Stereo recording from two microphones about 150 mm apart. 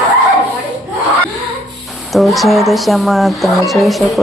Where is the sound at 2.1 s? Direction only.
Centre (ahead or behind).